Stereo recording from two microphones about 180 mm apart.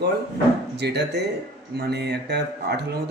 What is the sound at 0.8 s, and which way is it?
A man's voice, 65° right (ahead or behind).